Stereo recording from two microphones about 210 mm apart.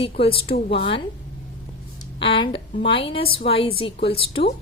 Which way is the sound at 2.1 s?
25° left (ahead or behind).